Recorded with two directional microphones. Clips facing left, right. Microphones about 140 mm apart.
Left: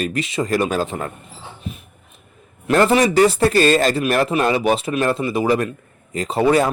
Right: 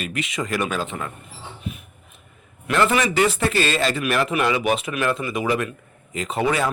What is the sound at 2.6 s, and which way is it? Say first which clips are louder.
Speech: left 5 dB; 35° left (ahead or behind).